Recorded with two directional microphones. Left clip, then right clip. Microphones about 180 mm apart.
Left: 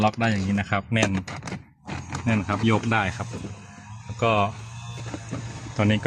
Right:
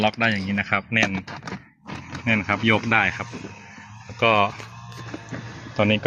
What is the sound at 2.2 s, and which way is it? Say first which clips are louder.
Speech: right 5 dB; centre (ahead or behind).